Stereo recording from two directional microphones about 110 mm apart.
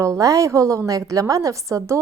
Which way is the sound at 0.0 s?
30° right (ahead or behind).